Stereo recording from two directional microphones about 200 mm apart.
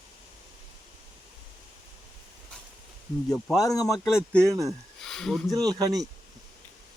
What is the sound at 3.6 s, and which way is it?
Speech, 15° left (ahead or behind).